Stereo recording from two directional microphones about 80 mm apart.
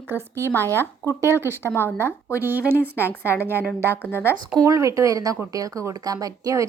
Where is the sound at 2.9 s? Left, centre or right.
Left.